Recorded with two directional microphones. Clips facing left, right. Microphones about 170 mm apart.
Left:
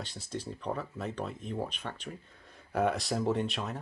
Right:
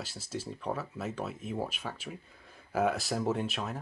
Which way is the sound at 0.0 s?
5° right (ahead or behind).